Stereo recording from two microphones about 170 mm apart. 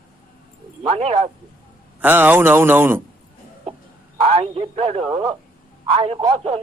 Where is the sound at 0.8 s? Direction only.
35° right (ahead or behind).